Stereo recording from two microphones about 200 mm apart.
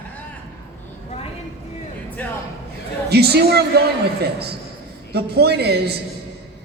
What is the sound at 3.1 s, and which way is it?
Speech, 55° right (ahead or behind).